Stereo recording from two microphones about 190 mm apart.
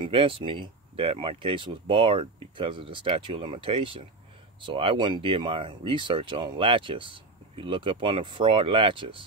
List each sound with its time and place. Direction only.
0.0 s speech: 30° right (ahead or behind)